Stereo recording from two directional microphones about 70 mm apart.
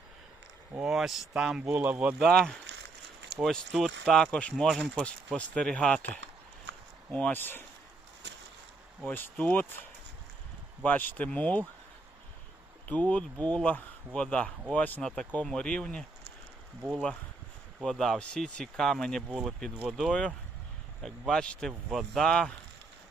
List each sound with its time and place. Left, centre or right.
0.8 s speech: centre
1.7 s speech: centre
2.1 s speech: centre
4.7 s speech: centre
5.0 s speech: centre
7.1 s speech: centre
9.0 s speech: left
10.8 s speech: left
12.9 s speech: centre
15.0 s speech: centre
17.8 s speech: centre